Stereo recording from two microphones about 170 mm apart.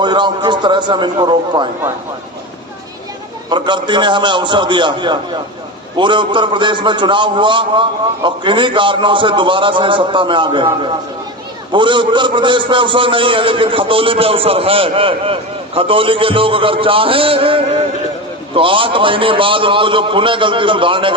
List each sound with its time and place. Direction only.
0.0 s a man's voice: 25° right (ahead or behind)
3.5 s a man's voice: 25° right (ahead or behind)